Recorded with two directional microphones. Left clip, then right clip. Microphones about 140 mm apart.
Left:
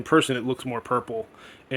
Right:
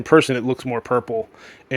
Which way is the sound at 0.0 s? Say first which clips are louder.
Right 6 dB; 40° right (ahead or behind).